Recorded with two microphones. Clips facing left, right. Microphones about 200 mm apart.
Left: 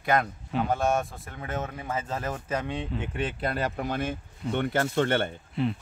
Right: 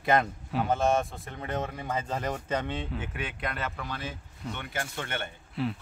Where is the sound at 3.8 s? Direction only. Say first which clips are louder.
Left 8 dB; 50° left (ahead or behind).